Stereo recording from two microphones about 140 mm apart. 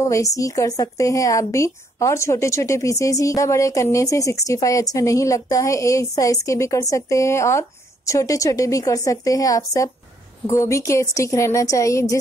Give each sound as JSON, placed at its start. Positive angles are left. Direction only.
{"t": 0.0, "sound": "a woman's voice", "side_deg": 25}